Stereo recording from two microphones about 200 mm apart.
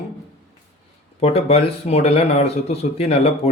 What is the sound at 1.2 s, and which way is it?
A man's voice, 30° left (ahead or behind).